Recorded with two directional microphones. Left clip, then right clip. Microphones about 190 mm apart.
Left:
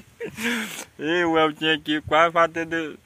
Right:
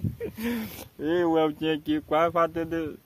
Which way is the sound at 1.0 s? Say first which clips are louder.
Left 3 dB; 30° left (ahead or behind).